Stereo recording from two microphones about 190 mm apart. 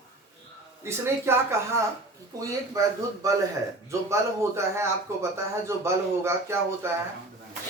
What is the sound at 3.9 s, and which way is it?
Speech, 15° right (ahead or behind).